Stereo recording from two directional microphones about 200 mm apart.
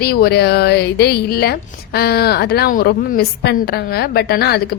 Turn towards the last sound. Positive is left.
turn(degrees=50)  # may be behind; listen again after turning